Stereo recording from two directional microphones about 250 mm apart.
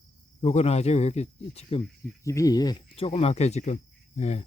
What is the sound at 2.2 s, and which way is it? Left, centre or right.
Speech, centre.